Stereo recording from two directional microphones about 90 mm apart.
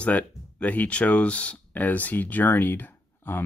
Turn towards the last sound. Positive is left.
turn(degrees=25)  # may be behind; listen again after turning